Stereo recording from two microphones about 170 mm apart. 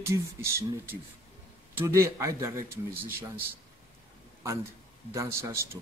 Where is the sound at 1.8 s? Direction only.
15° right (ahead or behind).